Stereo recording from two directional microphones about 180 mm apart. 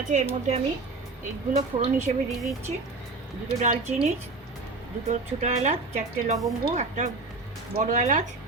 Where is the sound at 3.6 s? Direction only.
40° right (ahead or behind).